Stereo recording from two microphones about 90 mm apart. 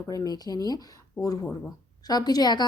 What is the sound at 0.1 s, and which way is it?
Speech, 45° left (ahead or behind).